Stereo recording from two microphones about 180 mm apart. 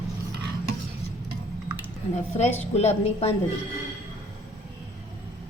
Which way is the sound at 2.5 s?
35° left (ahead or behind).